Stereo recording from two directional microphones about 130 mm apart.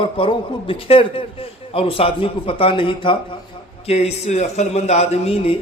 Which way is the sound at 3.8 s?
55° left (ahead or behind).